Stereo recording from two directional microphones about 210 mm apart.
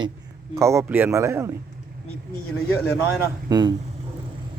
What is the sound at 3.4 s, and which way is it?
Speech, 20° right (ahead or behind).